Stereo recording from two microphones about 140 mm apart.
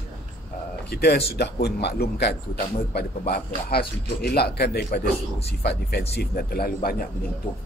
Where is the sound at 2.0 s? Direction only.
90° left.